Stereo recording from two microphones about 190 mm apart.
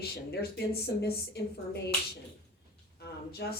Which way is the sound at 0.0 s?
60° left (ahead or behind).